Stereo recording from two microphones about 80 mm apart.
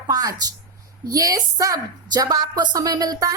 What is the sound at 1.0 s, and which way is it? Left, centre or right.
A woman's voice, right.